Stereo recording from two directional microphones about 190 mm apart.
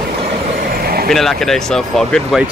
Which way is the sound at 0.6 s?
50° right (ahead or behind).